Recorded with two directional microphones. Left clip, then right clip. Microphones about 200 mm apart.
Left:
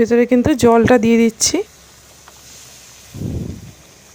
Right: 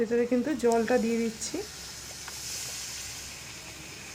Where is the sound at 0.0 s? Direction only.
50° left (ahead or behind).